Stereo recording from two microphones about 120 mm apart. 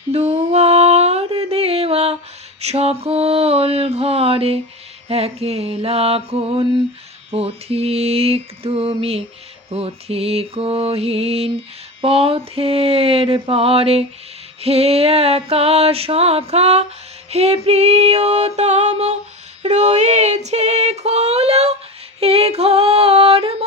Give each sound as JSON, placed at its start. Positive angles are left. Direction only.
{"t": 0.1, "sound": "a sound", "side_deg": -55}
{"t": 2.6, "sound": "music", "side_deg": -60}
{"t": 12.0, "sound": "a sound", "side_deg": -50}
{"t": 14.6, "sound": "music", "side_deg": -55}
{"t": 19.6, "sound": "female singing", "side_deg": -70}
{"t": 22.2, "sound": "music", "side_deg": -55}